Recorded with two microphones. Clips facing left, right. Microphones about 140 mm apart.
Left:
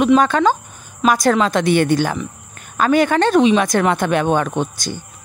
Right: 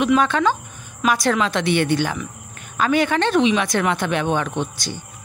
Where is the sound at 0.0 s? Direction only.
40° left (ahead or behind).